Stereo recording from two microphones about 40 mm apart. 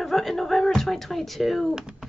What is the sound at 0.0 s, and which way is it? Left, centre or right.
Speech, centre.